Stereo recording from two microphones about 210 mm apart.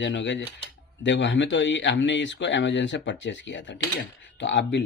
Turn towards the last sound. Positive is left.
turn(degrees=60)  # may be behind; listen again after turning